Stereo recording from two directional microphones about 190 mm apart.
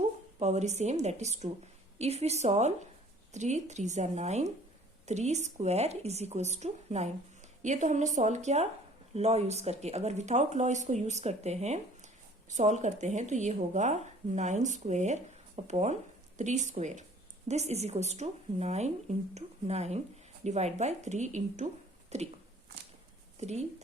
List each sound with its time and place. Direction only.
0.3 s speech: 35° right (ahead or behind)
22.1 s a sound: 35° right (ahead or behind)
23.4 s speech: 35° right (ahead or behind)